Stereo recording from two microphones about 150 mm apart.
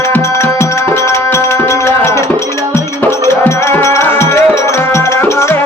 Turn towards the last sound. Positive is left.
turn(degrees=20)  # may be behind; listen again after turning